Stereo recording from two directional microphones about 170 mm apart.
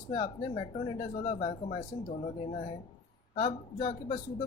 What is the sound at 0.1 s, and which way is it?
Speech, 25° left (ahead or behind).